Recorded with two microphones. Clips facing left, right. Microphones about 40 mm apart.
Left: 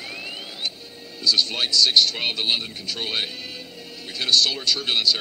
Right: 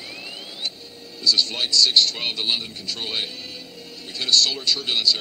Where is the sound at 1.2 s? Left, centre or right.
Centre.